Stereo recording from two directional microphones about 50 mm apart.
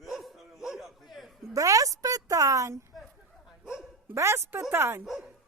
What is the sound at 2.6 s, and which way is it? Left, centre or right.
Speech, right.